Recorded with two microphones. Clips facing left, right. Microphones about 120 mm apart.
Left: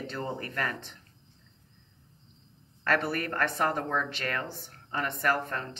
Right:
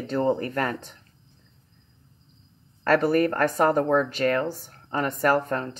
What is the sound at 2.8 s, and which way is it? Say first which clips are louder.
A woman's voice: right 9 dB; 40° right (ahead or behind).